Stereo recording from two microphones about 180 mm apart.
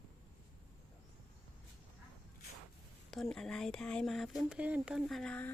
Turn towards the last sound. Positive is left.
turn(degrees=5)  # may be behind; listen again after turning